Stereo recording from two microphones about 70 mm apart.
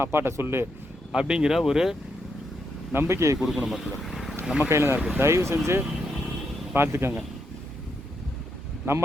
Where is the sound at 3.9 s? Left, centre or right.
Centre.